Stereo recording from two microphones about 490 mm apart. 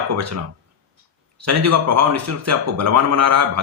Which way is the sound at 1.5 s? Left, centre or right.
Right.